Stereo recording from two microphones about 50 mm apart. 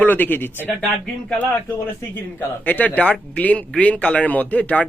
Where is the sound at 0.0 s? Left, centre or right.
Left.